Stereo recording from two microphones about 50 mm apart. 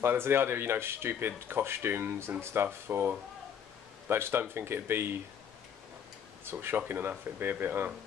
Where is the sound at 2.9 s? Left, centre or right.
Right.